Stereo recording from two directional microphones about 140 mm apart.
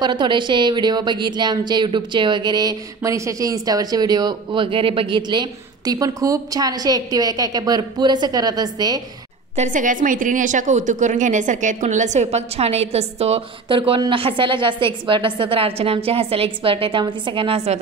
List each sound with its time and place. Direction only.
0.0 s a woman's voice: 30° right (ahead or behind)
9.6 s a woman's voice: 70° right (ahead or behind); by 13.7 s 50° right (ahead or behind)
13.7 s a woman's voice: 35° right (ahead or behind)